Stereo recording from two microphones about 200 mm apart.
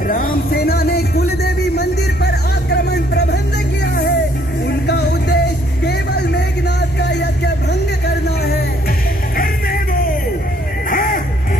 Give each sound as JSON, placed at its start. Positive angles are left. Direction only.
{"t": 0.1, "sound": "music", "side_deg": 45}
{"t": 5.9, "sound": "vehicle", "side_deg": 55}
{"t": 7.0, "sound": "music", "side_deg": 55}
{"t": 10.9, "sound": "a sound", "side_deg": 45}